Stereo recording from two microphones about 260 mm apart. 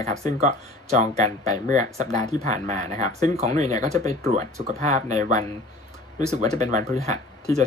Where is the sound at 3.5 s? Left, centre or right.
Centre.